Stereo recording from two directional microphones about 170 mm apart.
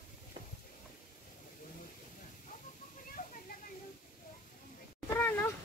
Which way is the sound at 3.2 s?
50° left (ahead or behind).